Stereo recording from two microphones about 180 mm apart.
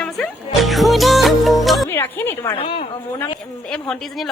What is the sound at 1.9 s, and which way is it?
Speech, 10° left (ahead or behind).